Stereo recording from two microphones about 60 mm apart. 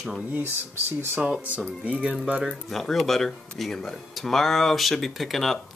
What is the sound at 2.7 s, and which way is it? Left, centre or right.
Speech, centre.